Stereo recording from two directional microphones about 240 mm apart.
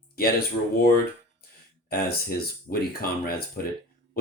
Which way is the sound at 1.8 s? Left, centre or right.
Left.